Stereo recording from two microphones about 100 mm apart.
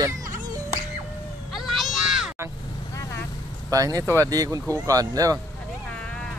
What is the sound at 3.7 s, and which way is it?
Speech, 35° right (ahead or behind).